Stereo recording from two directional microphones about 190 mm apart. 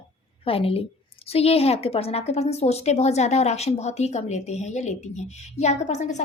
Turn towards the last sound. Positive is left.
turn(degrees=40)  # may be behind; listen again after turning